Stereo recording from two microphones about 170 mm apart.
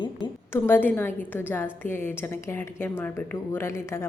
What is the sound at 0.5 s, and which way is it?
A woman's voice, 15° left (ahead or behind).